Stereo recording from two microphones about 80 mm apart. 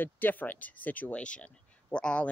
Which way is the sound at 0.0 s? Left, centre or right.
Left.